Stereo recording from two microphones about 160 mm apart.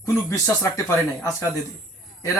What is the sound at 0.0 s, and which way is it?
Speech, 20° left (ahead or behind).